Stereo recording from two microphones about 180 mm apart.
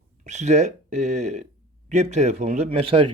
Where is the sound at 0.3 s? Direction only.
40° right (ahead or behind).